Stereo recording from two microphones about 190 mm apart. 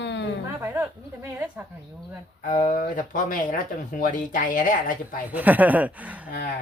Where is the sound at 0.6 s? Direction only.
15° right (ahead or behind).